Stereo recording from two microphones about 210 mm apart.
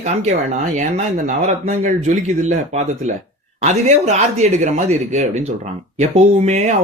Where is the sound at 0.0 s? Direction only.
35° right (ahead or behind).